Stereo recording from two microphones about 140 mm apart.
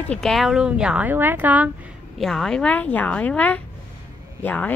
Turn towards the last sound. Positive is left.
turn(degrees=10)  # may be behind; listen again after turning